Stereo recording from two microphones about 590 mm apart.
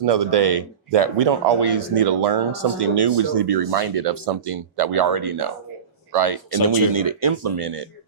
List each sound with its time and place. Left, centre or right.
0.3 s speech: right
6.6 s speech: left
6.9 s speech: right